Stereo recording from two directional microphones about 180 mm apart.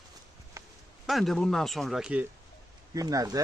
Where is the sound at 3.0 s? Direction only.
20° right (ahead or behind).